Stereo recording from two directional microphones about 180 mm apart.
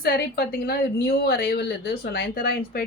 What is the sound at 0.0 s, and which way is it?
A woman's voice, 60° left (ahead or behind).